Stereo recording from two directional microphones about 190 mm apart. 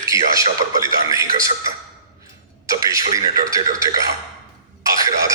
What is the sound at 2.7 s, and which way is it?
A man's voice, 15° right (ahead or behind).